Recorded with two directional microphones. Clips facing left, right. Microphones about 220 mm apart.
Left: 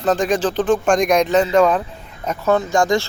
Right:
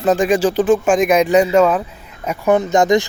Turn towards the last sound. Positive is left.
turn(degrees=-20)  # may be behind; listen again after turning